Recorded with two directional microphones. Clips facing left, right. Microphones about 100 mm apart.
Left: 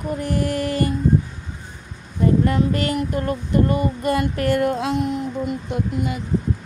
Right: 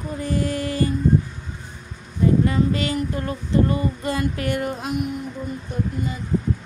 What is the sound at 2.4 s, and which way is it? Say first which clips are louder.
Speech: left 1 dB; 60° left (ahead or behind).